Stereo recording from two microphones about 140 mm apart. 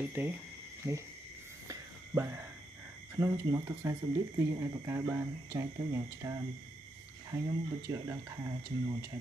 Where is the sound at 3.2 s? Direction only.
25° right (ahead or behind).